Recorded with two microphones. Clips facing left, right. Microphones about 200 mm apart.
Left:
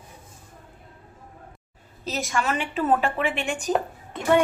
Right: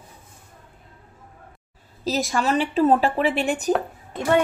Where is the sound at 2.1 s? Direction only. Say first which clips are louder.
Right 4 dB; 35° right (ahead or behind).